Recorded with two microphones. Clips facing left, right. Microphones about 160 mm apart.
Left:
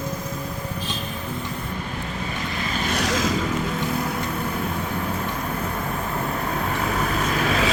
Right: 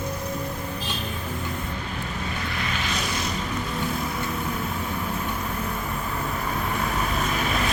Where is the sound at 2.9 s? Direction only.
85° left.